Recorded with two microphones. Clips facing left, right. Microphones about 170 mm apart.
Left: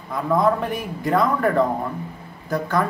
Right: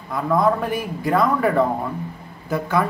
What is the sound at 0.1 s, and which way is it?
Speech, centre (ahead or behind).